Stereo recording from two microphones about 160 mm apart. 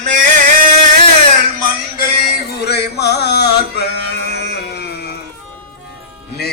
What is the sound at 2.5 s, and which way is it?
Music, 90° left.